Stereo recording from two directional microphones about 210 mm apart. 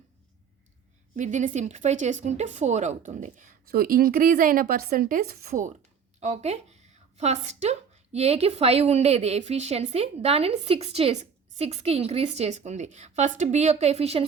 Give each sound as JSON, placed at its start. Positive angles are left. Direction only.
{"t": 1.1, "sound": "a woman's voice", "side_deg": -35}